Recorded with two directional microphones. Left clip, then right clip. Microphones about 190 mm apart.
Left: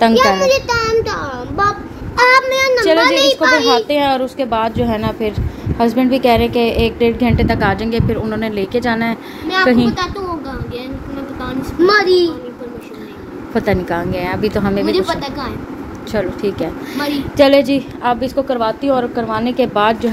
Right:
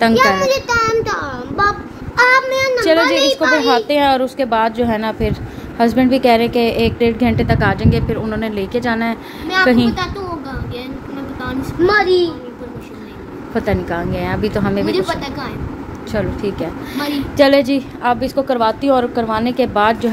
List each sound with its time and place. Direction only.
0.0 s a woman's voice: 5° right (ahead or behind)
0.4 s child singing: 5° right (ahead or behind)
2.1 s child singing: 15° left (ahead or behind)
2.5 s a sound: 30° left (ahead or behind)
3.2 s a child's voice: 40° left (ahead or behind)
3.8 s a woman's voice: 10° right (ahead or behind)
11.8 s a child's voice: 45° left (ahead or behind)
13.5 s a woman's voice: 10° left (ahead or behind)